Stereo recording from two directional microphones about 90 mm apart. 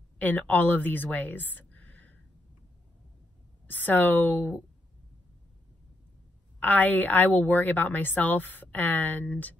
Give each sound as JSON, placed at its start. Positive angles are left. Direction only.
{"t": 0.2, "sound": "a woman's voice", "side_deg": 20}
{"t": 3.6, "sound": "a woman's voice", "side_deg": 20}
{"t": 6.6, "sound": "a woman's voice", "side_deg": 20}